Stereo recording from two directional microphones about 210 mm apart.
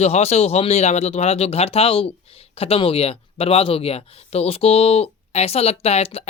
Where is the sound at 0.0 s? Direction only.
30° left (ahead or behind).